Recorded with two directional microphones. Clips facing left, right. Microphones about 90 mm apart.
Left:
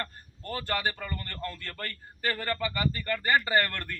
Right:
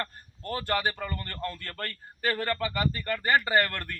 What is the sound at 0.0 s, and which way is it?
Speech, 15° right (ahead or behind).